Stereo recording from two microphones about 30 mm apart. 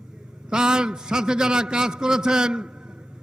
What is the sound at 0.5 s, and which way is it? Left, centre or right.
A man's voice, right.